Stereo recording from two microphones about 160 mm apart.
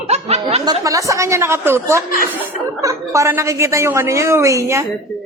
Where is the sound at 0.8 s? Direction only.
20° right (ahead or behind).